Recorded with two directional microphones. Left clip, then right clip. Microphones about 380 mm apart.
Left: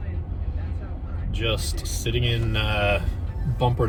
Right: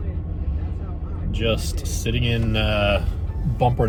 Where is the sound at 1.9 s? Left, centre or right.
Centre.